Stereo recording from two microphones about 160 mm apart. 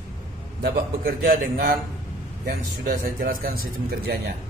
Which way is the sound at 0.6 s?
70° right (ahead or behind).